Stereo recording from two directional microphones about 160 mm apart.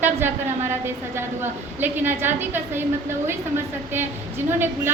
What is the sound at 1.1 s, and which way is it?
A woman's voice, 15° right (ahead or behind).